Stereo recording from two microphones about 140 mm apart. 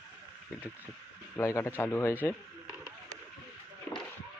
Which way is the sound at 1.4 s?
20° left (ahead or behind).